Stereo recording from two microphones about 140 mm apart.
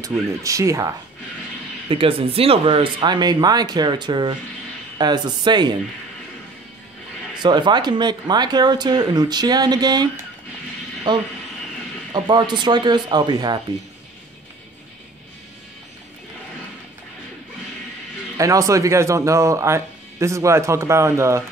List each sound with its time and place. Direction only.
0.0 s speech: 25° right (ahead or behind)
1.9 s speech: 40° right (ahead or behind)
7.3 s speech: 35° right (ahead or behind)
18.4 s speech: 25° right (ahead or behind)